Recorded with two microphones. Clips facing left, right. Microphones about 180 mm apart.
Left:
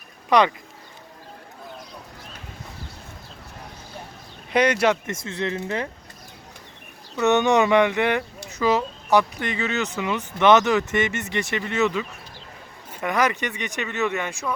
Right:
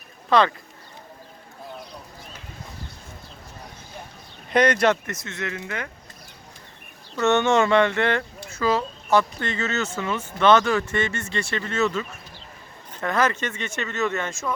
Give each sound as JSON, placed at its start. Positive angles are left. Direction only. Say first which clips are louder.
{"t": 0.3, "sound": "speech", "louder": "left 1 dB", "side_deg": 15}
{"t": 4.5, "sound": "speech", "louder": "even", "side_deg": 10}
{"t": 5.0, "sound": "speech", "louder": "left 4 dB", "side_deg": 30}
{"t": 7.2, "sound": "speech", "louder": "left 1 dB", "side_deg": 15}